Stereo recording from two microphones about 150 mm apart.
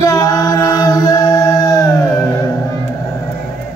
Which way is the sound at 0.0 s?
25° left (ahead or behind).